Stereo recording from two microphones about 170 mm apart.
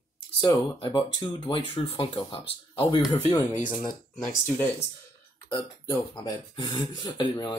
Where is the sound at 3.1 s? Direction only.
20° left (ahead or behind).